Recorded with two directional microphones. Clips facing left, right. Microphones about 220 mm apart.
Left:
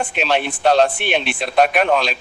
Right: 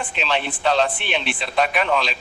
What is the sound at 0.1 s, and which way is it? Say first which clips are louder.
Speech: left 5 dB; 50° left (ahead or behind).